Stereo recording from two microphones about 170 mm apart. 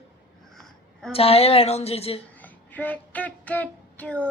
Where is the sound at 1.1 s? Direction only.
35° left (ahead or behind).